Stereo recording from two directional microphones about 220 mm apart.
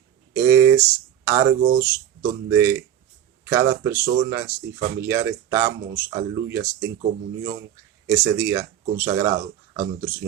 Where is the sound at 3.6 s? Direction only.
45° right (ahead or behind).